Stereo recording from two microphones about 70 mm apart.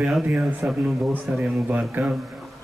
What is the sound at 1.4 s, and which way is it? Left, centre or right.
Speech, right.